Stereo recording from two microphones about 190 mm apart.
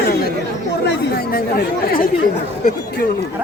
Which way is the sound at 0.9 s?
55° left (ahead or behind).